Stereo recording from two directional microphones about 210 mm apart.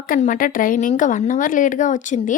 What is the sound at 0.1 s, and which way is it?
A woman's voice, 40° left (ahead or behind).